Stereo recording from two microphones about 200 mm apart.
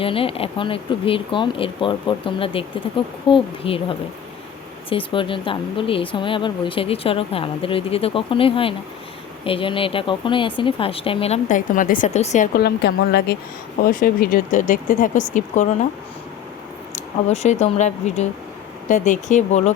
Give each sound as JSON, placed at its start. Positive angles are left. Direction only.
{"t": 0.0, "sound": "speech", "side_deg": 25}
{"t": 12.5, "sound": "speech", "side_deg": 55}
{"t": 16.9, "sound": "speech", "side_deg": 35}